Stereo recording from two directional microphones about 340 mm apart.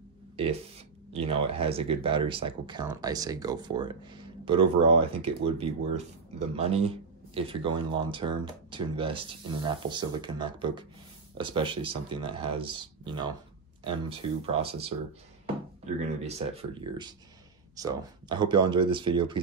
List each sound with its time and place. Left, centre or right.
1.1 s speech: centre
15.4 s a sound: centre
17.7 s speech: centre